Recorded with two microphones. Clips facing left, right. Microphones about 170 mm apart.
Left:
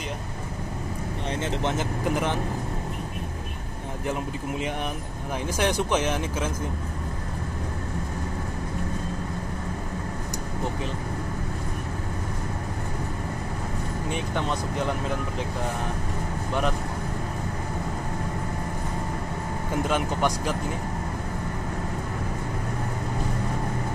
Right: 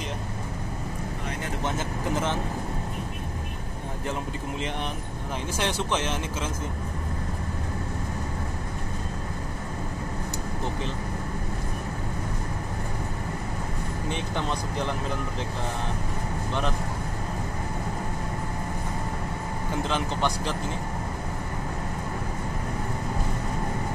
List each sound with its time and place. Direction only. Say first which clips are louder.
1.4 s speech: left 3 dB; 20° left (ahead or behind)
5.6 s speech: left 4 dB; 15° left (ahead or behind)
19.9 s speech: left 2 dB; 10° left (ahead or behind)